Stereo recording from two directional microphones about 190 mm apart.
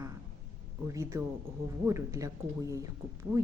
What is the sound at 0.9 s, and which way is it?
Speech, 15° right (ahead or behind).